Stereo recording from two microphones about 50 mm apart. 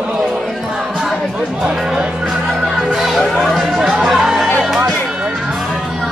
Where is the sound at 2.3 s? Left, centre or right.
Centre.